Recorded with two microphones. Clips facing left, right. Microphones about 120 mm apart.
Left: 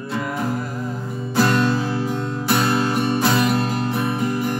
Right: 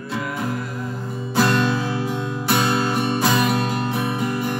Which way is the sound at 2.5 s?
20° right (ahead or behind).